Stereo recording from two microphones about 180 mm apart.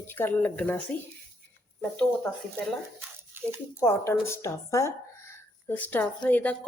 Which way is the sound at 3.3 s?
10° right (ahead or behind).